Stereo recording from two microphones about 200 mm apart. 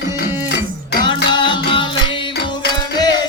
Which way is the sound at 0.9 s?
25° left (ahead or behind).